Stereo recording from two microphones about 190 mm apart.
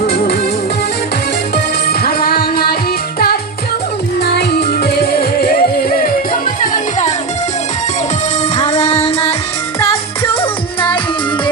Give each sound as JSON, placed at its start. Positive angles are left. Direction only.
{"t": 0.0, "sound": "music", "side_deg": 55}
{"t": 1.9, "sound": "music", "side_deg": 55}
{"t": 4.2, "sound": "music", "side_deg": 60}
{"t": 8.6, "sound": "music", "side_deg": 35}